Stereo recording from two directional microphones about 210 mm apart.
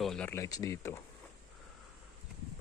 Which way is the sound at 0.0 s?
5° left (ahead or behind).